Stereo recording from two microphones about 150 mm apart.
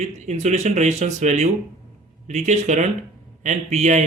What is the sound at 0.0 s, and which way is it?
Speech, 50° right (ahead or behind).